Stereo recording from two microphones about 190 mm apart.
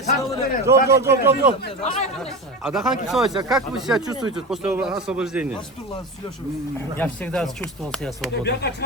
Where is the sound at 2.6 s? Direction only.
Centre (ahead or behind).